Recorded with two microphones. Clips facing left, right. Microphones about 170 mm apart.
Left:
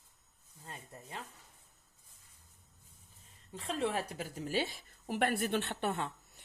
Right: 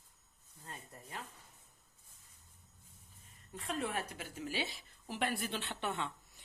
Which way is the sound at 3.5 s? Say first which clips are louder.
Left 4 dB; 30° left (ahead or behind).